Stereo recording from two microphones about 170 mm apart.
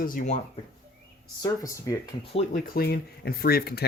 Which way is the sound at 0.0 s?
50° left (ahead or behind).